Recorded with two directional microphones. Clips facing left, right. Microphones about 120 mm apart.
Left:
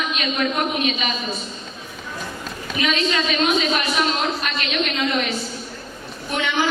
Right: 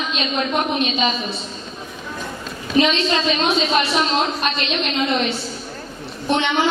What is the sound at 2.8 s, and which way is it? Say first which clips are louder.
A woman's voice: right 4 dB; 30° right (ahead or behind).